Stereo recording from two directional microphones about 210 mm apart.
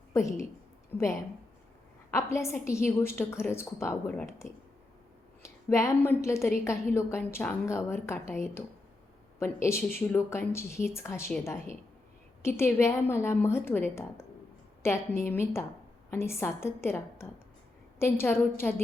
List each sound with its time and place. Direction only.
0.1 s a woman's voice: 15° left (ahead or behind)